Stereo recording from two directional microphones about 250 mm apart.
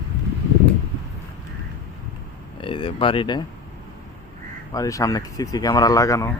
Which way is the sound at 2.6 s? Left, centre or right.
Centre.